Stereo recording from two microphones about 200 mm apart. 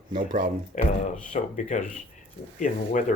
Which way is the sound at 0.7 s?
40° left (ahead or behind).